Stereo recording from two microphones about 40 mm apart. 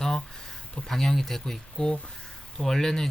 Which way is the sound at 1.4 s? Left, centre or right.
Centre.